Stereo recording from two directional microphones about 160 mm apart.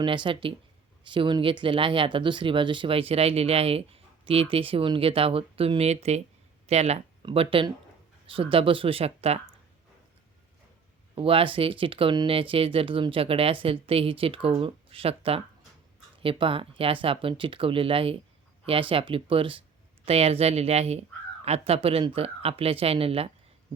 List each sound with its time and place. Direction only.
0.0 s speech: 30° right (ahead or behind)
11.1 s speech: 35° right (ahead or behind)